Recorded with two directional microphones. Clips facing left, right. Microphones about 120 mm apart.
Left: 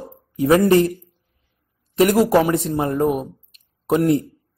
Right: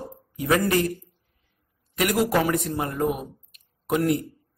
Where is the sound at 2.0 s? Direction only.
30° left (ahead or behind).